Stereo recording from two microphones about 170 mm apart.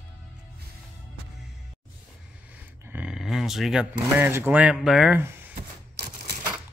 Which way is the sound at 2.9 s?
5° right (ahead or behind).